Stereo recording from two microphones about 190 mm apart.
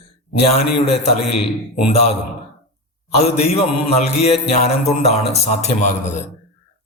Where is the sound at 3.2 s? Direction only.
35° left (ahead or behind).